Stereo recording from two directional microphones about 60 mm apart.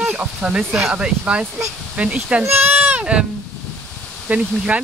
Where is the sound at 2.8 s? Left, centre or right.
Centre.